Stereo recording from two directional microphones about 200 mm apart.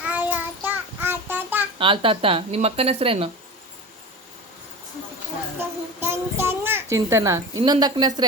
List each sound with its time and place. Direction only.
0.1 s child singing: 10° right (ahead or behind)
1.8 s speech: 25° right (ahead or behind)
5.5 s child singing: 10° right (ahead or behind)
7.6 s speech: 20° right (ahead or behind)